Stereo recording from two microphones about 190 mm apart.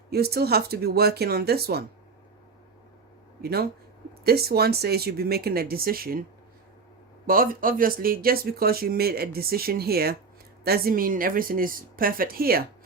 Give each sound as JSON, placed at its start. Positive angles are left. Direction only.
{"t": 0.1, "sound": "speech", "side_deg": -55}
{"t": 3.4, "sound": "speech", "side_deg": -55}
{"t": 7.3, "sound": "speech", "side_deg": -50}